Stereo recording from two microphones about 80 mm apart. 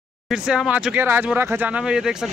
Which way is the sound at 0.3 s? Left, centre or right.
Centre.